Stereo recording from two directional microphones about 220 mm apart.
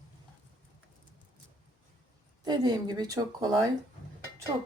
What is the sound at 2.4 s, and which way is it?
Speech, 20° right (ahead or behind).